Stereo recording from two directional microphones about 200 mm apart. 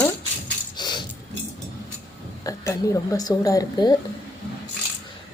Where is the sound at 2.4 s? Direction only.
15° left (ahead or behind).